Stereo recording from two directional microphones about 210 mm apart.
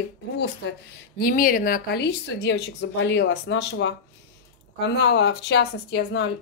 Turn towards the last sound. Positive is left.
turn(degrees=55)  # may be behind; listen again after turning